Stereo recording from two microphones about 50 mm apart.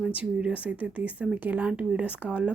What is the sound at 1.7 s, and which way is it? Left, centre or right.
Speech, right.